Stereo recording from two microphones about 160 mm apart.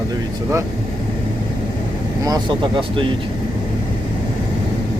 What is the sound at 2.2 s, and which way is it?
Speech, 25° right (ahead or behind).